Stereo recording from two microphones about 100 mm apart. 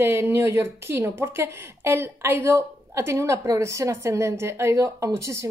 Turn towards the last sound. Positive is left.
turn(degrees=-30)  # may be behind; listen again after turning